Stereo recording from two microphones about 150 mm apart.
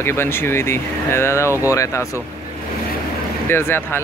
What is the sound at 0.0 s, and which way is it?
Speech, 15° left (ahead or behind).